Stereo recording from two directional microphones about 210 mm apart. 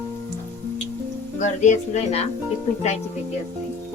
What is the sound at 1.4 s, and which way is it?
Speech, 35° left (ahead or behind).